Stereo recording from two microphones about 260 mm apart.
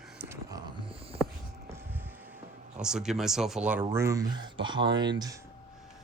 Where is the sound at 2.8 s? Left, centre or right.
Centre.